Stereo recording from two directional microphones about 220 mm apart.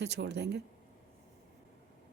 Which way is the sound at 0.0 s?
50° right (ahead or behind).